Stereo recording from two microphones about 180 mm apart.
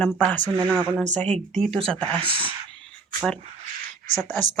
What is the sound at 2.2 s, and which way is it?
Speech, 30° right (ahead or behind).